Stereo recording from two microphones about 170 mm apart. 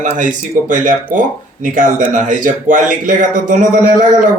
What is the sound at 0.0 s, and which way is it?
Speech, 50° right (ahead or behind).